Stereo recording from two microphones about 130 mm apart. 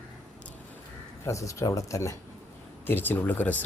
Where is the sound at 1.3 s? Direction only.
25° left (ahead or behind).